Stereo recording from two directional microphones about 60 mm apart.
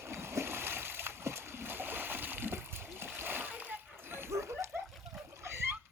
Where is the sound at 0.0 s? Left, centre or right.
Right.